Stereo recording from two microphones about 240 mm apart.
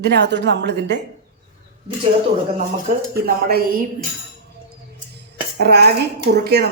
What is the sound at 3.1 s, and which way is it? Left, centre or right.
Speech, right.